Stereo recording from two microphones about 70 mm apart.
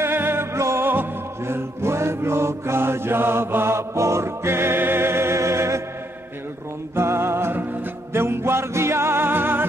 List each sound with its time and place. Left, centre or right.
0.0 s music: right
7.0 s music: right